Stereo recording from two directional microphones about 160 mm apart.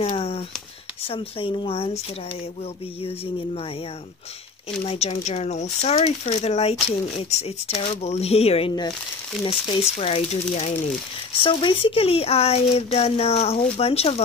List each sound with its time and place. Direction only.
0.1 s a sound: 35° left (ahead or behind)
1.0 s speech: 35° left (ahead or behind)
4.6 s speech: 40° left (ahead or behind)